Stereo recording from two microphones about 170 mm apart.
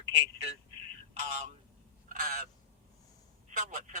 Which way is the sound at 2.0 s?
60° right (ahead or behind).